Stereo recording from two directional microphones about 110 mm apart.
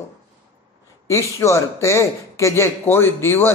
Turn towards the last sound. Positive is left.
turn(degrees=20)  # may be behind; listen again after turning